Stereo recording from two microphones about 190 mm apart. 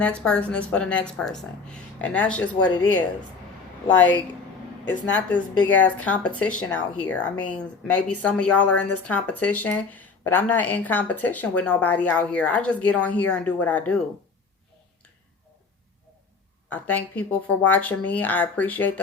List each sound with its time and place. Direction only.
0.0 s speech: 5° left (ahead or behind)
4.9 s speech: 10° left (ahead or behind)
16.6 s speech: 10° left (ahead or behind)